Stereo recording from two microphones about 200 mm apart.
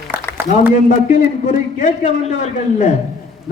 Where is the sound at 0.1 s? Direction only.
10° right (ahead or behind).